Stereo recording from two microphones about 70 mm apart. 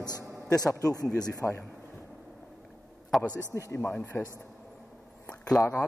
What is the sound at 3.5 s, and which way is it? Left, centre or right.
Speech, left.